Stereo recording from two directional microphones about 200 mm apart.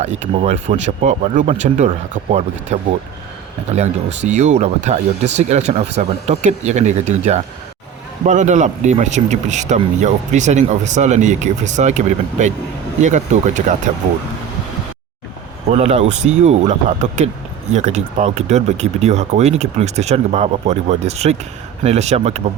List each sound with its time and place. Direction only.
0.0 s speech: 35° right (ahead or behind)
15.7 s speech: 30° right (ahead or behind)